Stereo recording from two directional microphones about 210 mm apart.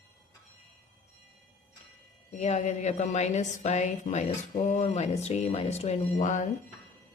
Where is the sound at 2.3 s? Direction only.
30° left (ahead or behind).